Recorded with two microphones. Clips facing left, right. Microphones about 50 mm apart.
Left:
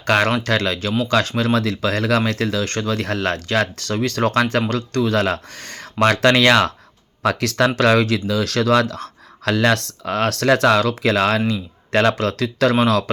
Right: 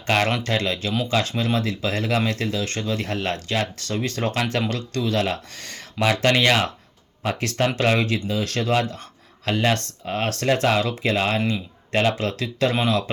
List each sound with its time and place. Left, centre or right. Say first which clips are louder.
0.0 s speech: left 4 dB; left
1.5 s speech: left 4 dB; left
6.0 s speech: left 5 dB; left
11.9 s speech: left 4 dB; left